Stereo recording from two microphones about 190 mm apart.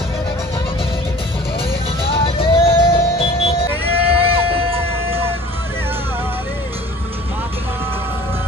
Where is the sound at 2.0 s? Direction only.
30° left (ahead or behind).